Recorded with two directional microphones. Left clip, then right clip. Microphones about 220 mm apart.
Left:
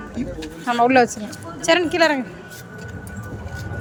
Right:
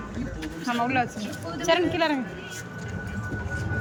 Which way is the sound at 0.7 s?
25° left (ahead or behind).